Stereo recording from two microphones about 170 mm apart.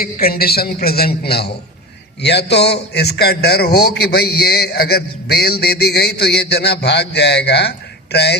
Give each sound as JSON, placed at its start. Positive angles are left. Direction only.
{"t": 0.0, "sound": "a man's voice", "side_deg": 60}